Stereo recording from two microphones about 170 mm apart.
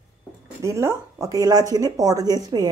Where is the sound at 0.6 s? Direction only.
15° right (ahead or behind).